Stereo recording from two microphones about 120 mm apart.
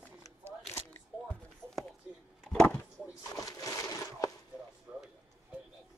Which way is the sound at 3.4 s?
30° left (ahead or behind).